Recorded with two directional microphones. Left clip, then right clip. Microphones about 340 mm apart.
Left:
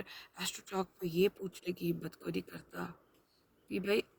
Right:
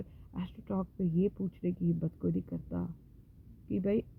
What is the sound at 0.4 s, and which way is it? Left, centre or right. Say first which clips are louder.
Speech: left 2 dB; centre.